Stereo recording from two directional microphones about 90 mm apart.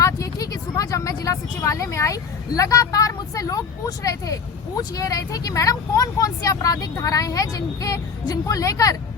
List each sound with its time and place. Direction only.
0.0 s speech: 40° left (ahead or behind)